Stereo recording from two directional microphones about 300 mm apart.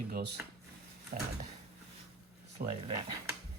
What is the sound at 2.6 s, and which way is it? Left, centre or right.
Speech, right.